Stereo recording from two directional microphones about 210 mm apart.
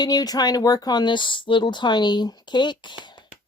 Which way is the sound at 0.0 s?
20° left (ahead or behind).